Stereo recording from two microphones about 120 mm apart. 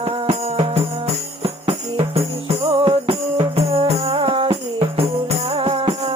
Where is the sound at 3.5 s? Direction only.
55° right (ahead or behind).